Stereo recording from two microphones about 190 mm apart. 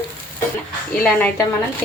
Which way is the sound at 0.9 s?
10° left (ahead or behind).